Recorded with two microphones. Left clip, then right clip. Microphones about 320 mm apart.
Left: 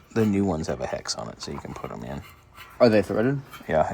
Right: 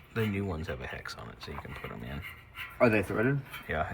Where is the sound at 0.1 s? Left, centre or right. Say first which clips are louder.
Left 10 dB; centre.